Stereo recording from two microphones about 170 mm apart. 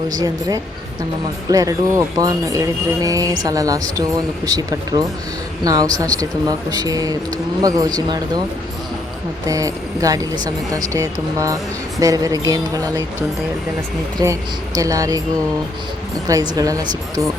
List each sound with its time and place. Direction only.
0.1 s speech: 20° right (ahead or behind)
9.5 s speech: 20° right (ahead or behind)
14.2 s speech: 25° right (ahead or behind)
16.2 s speech: 20° right (ahead or behind)